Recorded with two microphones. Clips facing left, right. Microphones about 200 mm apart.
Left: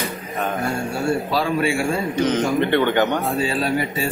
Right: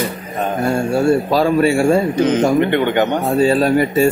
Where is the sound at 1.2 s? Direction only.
45° right (ahead or behind).